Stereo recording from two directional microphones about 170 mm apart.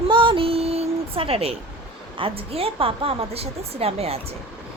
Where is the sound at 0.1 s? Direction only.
30° right (ahead or behind).